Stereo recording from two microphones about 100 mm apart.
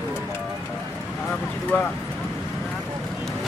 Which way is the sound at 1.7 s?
20° left (ahead or behind).